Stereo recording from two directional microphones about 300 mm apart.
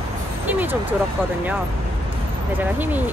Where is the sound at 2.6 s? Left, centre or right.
Centre.